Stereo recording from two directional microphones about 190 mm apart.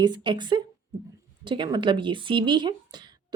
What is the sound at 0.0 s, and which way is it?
Speech, 25° right (ahead or behind).